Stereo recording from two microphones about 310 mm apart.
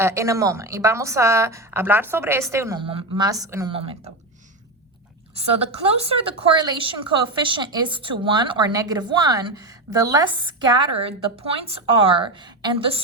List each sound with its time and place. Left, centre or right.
0.0 s a woman's voice: centre
5.3 s a woman's voice: centre